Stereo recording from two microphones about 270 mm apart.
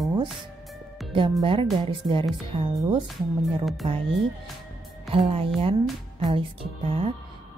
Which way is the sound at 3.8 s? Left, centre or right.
Centre.